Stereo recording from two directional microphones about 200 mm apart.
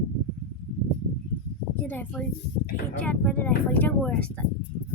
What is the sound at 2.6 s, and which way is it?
Speech, 55° left (ahead or behind).